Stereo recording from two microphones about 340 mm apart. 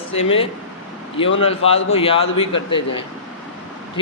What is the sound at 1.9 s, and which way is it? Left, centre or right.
A man's voice, centre.